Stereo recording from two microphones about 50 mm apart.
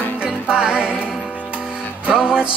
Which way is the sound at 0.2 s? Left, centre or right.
Centre.